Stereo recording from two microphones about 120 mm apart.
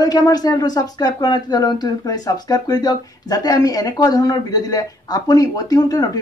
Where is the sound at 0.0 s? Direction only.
35° left (ahead or behind).